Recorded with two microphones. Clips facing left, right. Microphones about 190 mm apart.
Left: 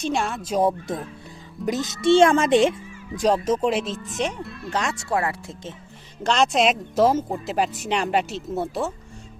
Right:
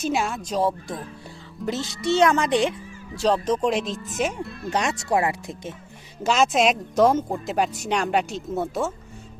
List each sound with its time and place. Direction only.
0.0 s speech: 5° right (ahead or behind)
0.5 s speech: 15° left (ahead or behind)
3.2 s speech: 5° left (ahead or behind)
4.7 s speech: 15° right (ahead or behind)
6.2 s speech: 5° right (ahead or behind)